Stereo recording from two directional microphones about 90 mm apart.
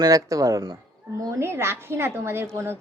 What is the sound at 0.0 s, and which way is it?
Speech, 40° right (ahead or behind).